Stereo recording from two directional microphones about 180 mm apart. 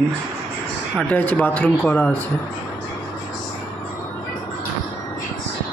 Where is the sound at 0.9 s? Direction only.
10° left (ahead or behind).